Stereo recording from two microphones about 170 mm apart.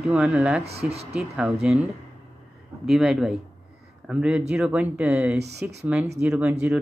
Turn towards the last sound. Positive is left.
turn(degrees=-10)  # may be behind; listen again after turning